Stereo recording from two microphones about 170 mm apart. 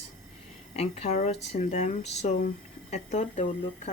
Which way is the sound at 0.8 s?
40° left (ahead or behind).